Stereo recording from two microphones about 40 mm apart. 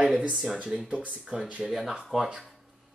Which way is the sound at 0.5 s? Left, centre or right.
Right.